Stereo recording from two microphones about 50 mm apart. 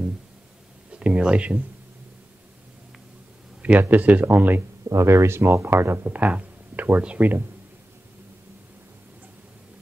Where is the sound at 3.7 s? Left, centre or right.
Right.